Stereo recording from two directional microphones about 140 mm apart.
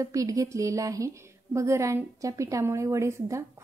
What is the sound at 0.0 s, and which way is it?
A woman's voice, 25° right (ahead or behind).